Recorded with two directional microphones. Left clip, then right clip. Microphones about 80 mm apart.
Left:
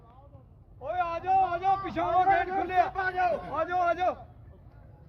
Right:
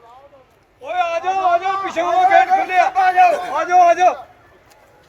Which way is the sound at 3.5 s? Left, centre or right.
Left.